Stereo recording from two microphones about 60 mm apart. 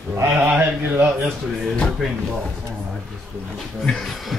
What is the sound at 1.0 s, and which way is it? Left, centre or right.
Speech, centre.